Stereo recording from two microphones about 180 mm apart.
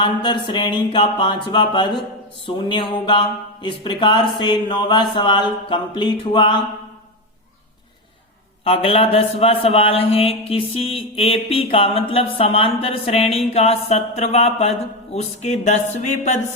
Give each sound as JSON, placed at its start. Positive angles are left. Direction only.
{"t": 0.0, "sound": "speech", "side_deg": 25}
{"t": 8.6, "sound": "a man's voice", "side_deg": 30}